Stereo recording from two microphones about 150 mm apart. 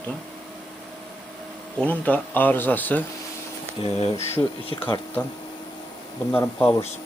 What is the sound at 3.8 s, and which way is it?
Speech, 40° left (ahead or behind).